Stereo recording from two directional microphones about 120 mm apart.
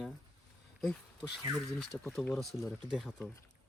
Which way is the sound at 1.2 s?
5° right (ahead or behind).